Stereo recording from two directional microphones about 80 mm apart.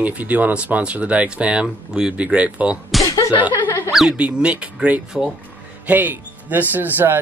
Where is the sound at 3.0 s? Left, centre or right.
Left.